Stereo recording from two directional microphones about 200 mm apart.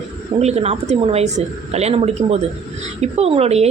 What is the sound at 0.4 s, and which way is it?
Speech, 30° right (ahead or behind).